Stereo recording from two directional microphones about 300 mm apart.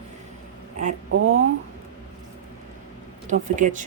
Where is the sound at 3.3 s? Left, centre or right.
Right.